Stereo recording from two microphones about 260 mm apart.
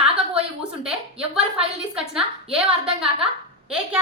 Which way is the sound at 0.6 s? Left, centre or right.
Centre.